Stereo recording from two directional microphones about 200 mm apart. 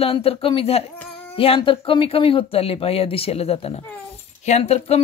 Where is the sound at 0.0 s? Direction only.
30° left (ahead or behind).